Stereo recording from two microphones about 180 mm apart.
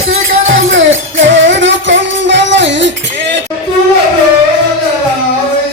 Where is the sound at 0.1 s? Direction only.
90° right.